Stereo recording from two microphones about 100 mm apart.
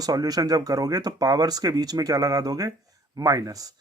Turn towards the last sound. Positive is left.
turn(degrees=-35)  # may be behind; listen again after turning